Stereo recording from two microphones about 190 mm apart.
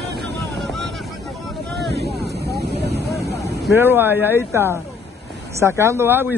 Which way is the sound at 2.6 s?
60° right (ahead or behind).